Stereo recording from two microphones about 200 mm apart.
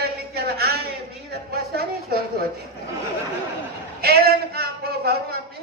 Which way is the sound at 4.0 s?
50° right (ahead or behind).